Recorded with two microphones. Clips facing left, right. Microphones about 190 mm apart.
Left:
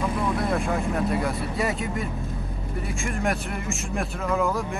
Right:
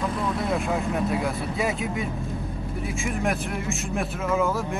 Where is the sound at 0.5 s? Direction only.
Centre (ahead or behind).